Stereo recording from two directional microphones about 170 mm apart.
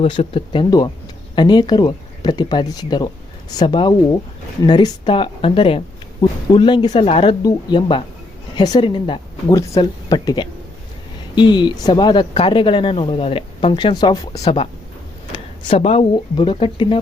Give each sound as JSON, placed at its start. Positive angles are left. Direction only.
{"t": 0.0, "sound": "speech", "side_deg": 35}
{"t": 12.3, "sound": "speech", "side_deg": 35}
{"t": 14.4, "sound": "speech", "side_deg": 35}
{"t": 15.3, "sound": "a sound", "side_deg": 30}
{"t": 16.1, "sound": "speech", "side_deg": 30}